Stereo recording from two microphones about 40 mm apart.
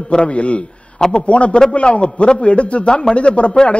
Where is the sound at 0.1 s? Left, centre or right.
Left.